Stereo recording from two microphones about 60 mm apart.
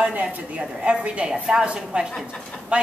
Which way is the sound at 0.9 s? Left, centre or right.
Centre.